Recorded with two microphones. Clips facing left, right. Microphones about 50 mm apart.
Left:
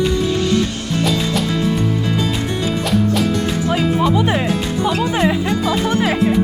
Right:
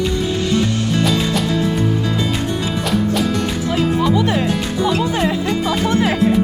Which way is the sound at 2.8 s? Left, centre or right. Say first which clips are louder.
Left 1 dB; centre.